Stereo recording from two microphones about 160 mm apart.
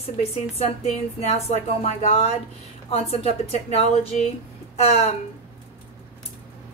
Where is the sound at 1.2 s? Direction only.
40° left (ahead or behind).